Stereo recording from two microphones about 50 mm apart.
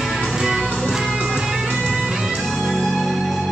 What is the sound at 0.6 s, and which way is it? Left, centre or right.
Music, centre.